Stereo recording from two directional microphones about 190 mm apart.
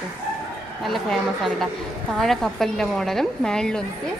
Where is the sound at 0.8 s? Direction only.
Centre (ahead or behind).